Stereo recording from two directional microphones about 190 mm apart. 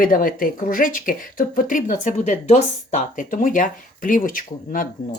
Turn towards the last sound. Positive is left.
turn(degrees=45)  # may be behind; listen again after turning